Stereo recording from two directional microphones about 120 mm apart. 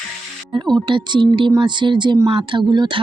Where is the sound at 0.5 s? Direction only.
30° right (ahead or behind).